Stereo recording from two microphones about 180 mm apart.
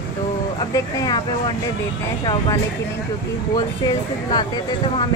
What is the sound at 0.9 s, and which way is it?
Speech, 20° left (ahead or behind).